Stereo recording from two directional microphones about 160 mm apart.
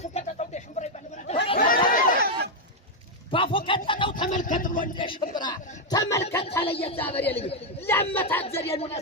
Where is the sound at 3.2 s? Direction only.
35° left (ahead or behind).